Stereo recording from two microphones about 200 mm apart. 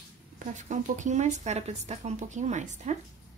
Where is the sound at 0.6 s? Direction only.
40° right (ahead or behind).